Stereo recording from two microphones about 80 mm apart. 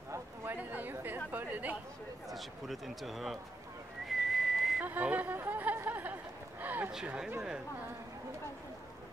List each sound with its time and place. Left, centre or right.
0.6 s chatter: right
2.2 s speech: centre
4.1 s whistling: centre
4.8 s speech: right
6.6 s a sound: right
7.1 s speech: centre